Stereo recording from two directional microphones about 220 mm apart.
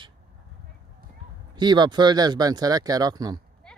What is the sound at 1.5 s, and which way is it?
Speech, 20° right (ahead or behind).